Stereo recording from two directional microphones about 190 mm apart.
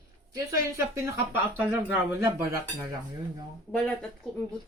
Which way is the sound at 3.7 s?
5° left (ahead or behind).